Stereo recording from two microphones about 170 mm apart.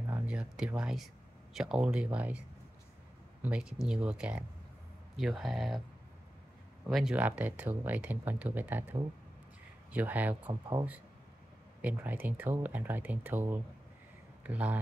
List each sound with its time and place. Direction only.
0.1 s speech: 5° right (ahead or behind)
3.4 s speech: 5° right (ahead or behind)
6.9 s speech: centre (ahead or behind)
9.9 s speech: 10° right (ahead or behind)
10.5 s speech: 20° right (ahead or behind)
11.8 s speech: 10° right (ahead or behind)